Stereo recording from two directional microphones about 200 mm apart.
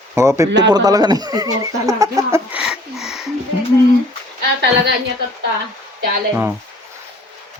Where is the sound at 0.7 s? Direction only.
20° right (ahead or behind); by 3.3 s centre (ahead or behind).